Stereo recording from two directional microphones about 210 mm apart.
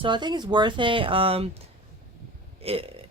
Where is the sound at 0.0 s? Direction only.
20° right (ahead or behind).